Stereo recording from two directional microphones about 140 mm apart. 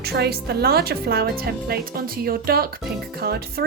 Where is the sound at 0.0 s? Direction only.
90° right.